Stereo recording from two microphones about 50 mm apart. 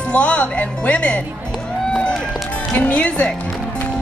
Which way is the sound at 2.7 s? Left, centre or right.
Left.